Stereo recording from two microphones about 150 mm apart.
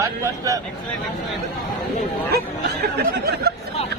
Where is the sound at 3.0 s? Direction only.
90° right.